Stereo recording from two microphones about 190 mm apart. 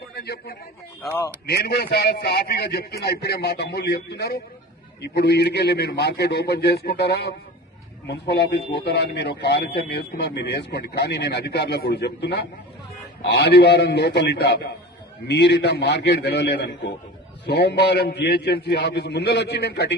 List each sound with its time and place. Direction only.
0.2 s speech: 55° left (ahead or behind)